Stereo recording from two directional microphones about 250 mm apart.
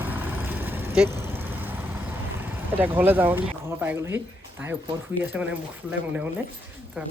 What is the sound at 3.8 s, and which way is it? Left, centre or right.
Speech, centre.